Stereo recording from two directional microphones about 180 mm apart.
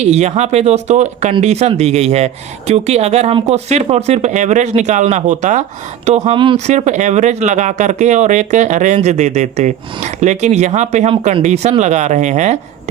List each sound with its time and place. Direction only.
0.0 s speech: 40° right (ahead or behind)
6.7 s speech: 40° right (ahead or behind)